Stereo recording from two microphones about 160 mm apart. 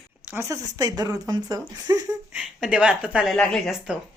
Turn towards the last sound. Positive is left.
turn(degrees=0)  # may be behind; listen again after turning